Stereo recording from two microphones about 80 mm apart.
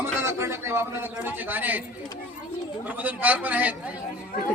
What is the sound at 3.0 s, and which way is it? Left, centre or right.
Speech, right.